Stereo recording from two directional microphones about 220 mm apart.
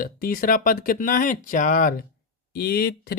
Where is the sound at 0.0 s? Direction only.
40° left (ahead or behind).